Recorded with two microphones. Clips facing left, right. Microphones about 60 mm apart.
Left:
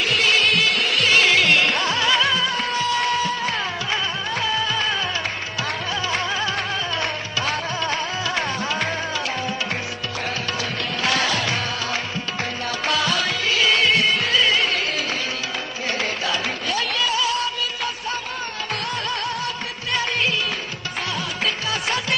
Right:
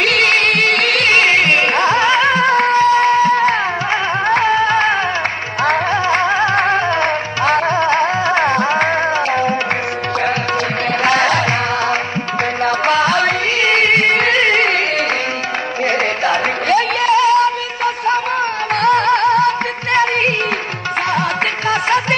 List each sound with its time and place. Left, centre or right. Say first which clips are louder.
0.0 s music: right 6 dB; right
1.1 s music: right 3 dB; right
11.1 s music: right 8 dB; right
12.6 s music: right 9 dB; right
14.1 s music: right 7 dB; right
16.3 s music: right 10 dB; right